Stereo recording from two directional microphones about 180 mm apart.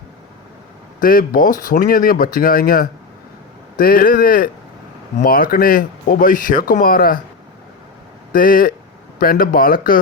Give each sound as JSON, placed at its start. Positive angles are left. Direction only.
{"t": 1.0, "sound": "speech", "side_deg": 50}
{"t": 8.3, "sound": "speech", "side_deg": 50}